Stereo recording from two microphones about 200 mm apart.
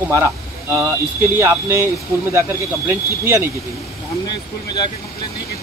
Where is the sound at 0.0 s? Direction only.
10° right (ahead or behind).